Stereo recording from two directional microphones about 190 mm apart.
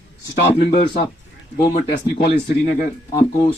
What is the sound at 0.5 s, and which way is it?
Speech, 55° left (ahead or behind).